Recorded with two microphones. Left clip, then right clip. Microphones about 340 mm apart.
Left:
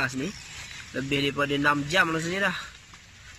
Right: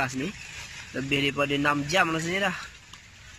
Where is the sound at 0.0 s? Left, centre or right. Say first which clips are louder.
Even; centre.